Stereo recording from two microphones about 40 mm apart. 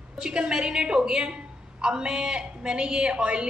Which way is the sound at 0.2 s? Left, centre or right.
Centre.